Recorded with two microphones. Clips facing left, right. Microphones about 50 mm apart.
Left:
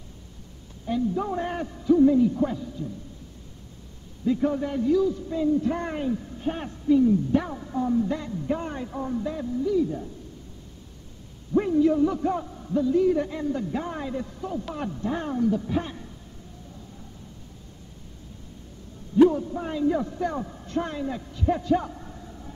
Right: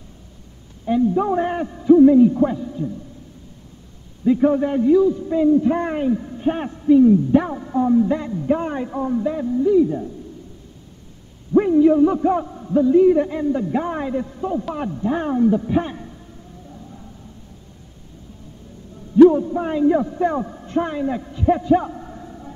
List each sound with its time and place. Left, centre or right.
0.8 s a man's voice: right
4.2 s a man's voice: right
11.5 s a man's voice: right
14.6 s a man's voice: centre
19.2 s a man's voice: right